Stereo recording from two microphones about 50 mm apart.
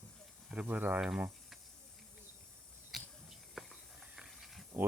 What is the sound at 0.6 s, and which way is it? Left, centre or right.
Speech, right.